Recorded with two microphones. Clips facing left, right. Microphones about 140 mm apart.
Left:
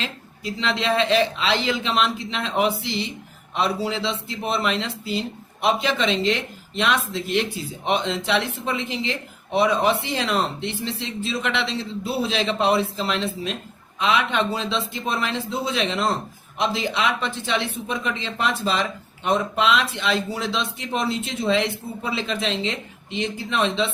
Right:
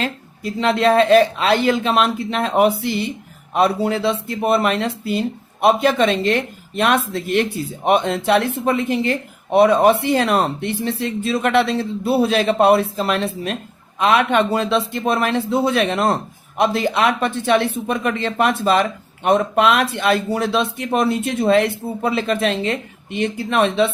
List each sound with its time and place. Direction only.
0.0 s speech: 55° right (ahead or behind)